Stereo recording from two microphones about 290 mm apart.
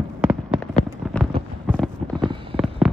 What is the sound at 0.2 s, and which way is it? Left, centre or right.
Fireworks, centre.